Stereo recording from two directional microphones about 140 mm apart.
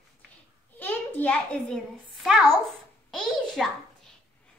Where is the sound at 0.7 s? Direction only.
10° left (ahead or behind).